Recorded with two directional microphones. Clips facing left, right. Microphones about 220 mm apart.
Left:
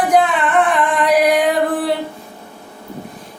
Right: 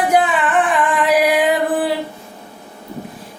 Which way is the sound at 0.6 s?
Centre (ahead or behind).